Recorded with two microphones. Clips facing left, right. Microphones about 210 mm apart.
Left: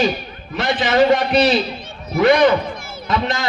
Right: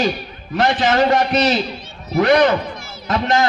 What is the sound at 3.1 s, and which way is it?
Speech, 50° right (ahead or behind).